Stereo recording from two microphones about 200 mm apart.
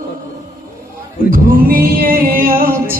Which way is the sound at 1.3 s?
45° right (ahead or behind).